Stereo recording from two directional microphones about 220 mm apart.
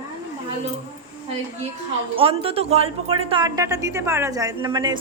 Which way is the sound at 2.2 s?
25° right (ahead or behind).